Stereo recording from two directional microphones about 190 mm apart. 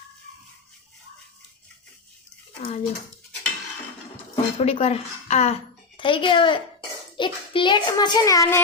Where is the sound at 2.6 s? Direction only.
30° left (ahead or behind).